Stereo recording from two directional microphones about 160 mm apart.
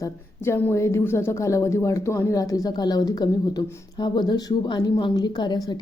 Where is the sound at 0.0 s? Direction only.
15° left (ahead or behind).